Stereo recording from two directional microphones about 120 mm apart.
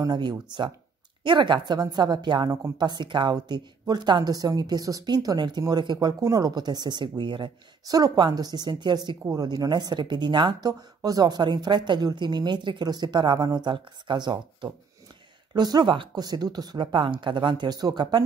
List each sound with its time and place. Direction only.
0.0 s a woman's voice: 35° right (ahead or behind)